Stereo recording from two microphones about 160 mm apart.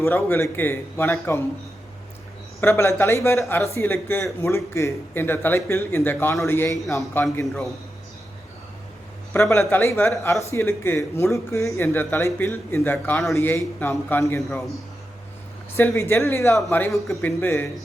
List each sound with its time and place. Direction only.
0.0 s speech: 15° left (ahead or behind)
2.6 s speech: 15° left (ahead or behind)
9.3 s speech: 15° left (ahead or behind)
15.7 s speech: 15° left (ahead or behind)
17.4 s speech: 15° left (ahead or behind)